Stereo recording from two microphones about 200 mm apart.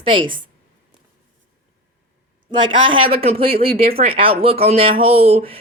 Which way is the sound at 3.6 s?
50° right (ahead or behind).